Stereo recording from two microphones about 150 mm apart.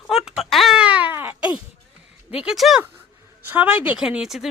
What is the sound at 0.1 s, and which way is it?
Baby cry, 5° right (ahead or behind).